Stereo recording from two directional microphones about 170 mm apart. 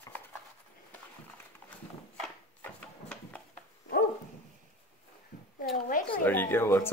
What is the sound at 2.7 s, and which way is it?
Wood, 5° left (ahead or behind).